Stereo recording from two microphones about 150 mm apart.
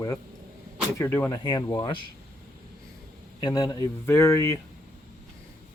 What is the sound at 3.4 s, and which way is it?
Speech, 25° left (ahead or behind).